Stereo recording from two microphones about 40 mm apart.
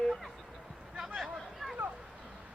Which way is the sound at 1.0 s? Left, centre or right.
Centre.